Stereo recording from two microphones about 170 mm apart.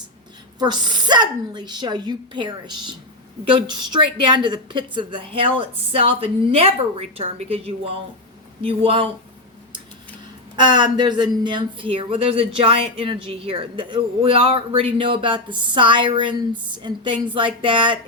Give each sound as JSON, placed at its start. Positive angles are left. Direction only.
{"t": 0.6, "sound": "speech", "side_deg": -25}
{"t": 10.6, "sound": "speech", "side_deg": -25}